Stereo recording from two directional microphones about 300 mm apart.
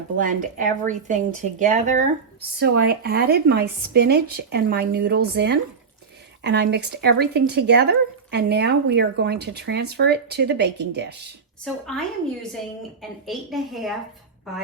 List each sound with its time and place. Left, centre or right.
0.2 s speech: right
11.6 s a woman's voice: centre